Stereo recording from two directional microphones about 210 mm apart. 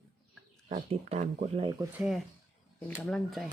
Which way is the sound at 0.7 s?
30° right (ahead or behind).